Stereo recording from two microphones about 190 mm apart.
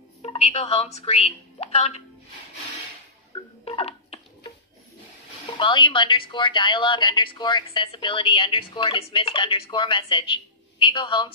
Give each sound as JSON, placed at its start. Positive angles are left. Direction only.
{"t": 0.2, "sound": "a woman's voice", "side_deg": 30}
{"t": 3.6, "sound": "a sound", "side_deg": 30}
{"t": 5.6, "sound": "a woman's voice", "side_deg": 25}